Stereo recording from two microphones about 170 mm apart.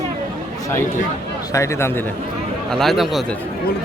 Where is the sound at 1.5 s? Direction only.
15° left (ahead or behind).